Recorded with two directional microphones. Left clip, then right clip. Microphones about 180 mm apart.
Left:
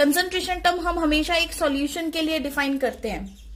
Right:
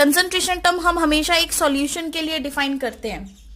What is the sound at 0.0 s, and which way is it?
A woman's voice, 40° right (ahead or behind).